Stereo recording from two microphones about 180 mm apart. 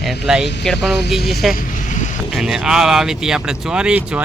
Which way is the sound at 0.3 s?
5° right (ahead or behind).